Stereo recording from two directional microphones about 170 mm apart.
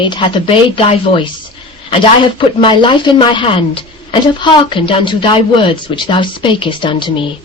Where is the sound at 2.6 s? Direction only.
30° left (ahead or behind).